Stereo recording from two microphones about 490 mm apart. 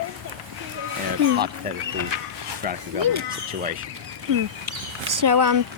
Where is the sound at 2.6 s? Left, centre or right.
Centre.